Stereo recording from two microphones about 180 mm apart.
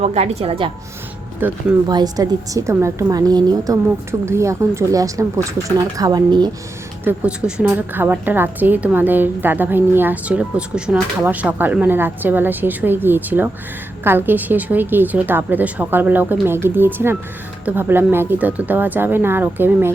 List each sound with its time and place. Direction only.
0.0 s a woman's voice: 35° right (ahead or behind)
1.4 s a woman's voice: 10° right (ahead or behind)
1.9 s speech: 20° right (ahead or behind)
7.0 s a woman's voice: 10° right (ahead or behind)